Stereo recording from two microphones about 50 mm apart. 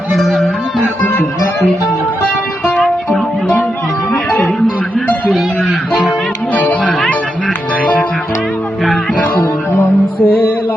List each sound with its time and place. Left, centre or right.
2.6 s music: centre
4.9 s music: centre
6.5 s music: left
9.7 s music: left